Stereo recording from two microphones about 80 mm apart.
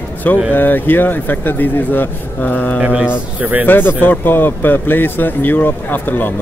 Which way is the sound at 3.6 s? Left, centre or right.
Left.